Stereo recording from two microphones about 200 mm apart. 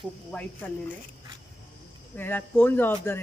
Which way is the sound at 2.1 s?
10° left (ahead or behind).